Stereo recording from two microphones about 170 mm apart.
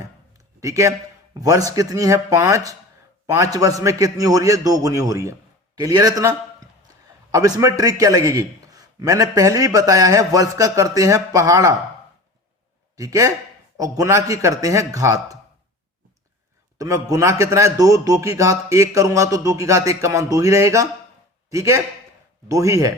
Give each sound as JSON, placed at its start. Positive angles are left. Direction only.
{"t": 0.6, "sound": "a man's voice", "side_deg": -20}
{"t": 13.0, "sound": "a man's voice", "side_deg": -20}
{"t": 16.7, "sound": "a man's voice", "side_deg": -20}